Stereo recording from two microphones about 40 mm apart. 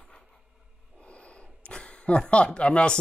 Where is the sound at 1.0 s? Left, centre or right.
Left.